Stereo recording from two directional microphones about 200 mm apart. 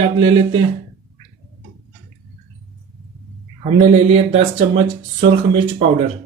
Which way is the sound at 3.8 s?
30° right (ahead or behind).